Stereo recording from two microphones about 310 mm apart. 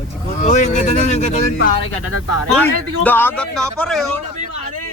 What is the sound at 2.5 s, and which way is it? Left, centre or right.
Speech, centre.